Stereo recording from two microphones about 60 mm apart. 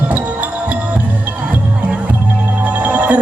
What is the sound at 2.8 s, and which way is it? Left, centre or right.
Music, right.